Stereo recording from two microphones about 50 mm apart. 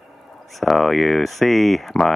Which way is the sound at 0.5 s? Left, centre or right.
Centre.